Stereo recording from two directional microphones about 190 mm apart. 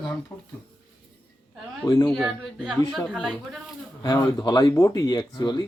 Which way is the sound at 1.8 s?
20° left (ahead or behind).